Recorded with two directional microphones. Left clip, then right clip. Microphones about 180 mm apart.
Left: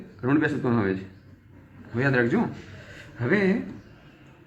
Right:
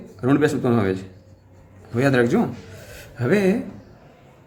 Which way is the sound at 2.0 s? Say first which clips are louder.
Right 5 dB; 85° right.